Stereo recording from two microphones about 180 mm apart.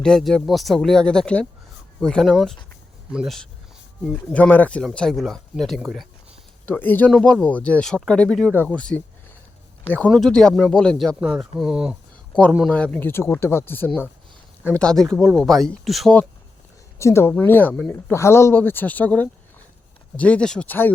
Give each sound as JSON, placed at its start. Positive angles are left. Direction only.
{"t": 0.0, "sound": "speech", "side_deg": 5}
{"t": 17.0, "sound": "speech", "side_deg": 15}